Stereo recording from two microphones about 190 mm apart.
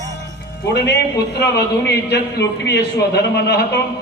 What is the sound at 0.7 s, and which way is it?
A man's voice, 60° left (ahead or behind).